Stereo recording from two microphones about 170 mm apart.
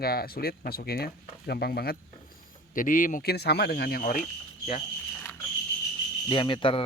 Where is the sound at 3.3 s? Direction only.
75° left (ahead or behind); by 4.3 s 50° left (ahead or behind).